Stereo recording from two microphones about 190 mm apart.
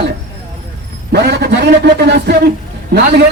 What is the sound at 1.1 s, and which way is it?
Speech, 60° right (ahead or behind).